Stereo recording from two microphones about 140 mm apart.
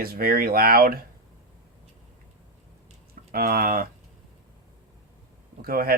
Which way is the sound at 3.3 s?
90° right.